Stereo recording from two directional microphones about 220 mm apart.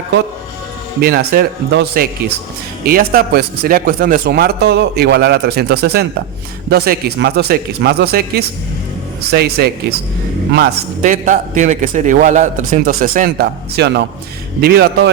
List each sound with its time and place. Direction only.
1.0 s a man's voice: 45° right (ahead or behind)